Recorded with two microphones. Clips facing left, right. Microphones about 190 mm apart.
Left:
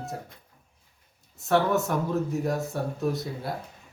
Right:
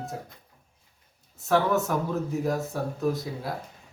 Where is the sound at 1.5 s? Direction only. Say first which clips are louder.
Even; centre (ahead or behind).